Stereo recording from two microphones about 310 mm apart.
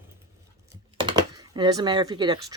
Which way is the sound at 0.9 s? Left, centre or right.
Centre.